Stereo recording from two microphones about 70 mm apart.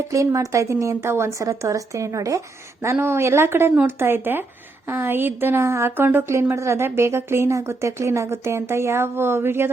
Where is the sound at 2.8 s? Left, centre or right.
Right.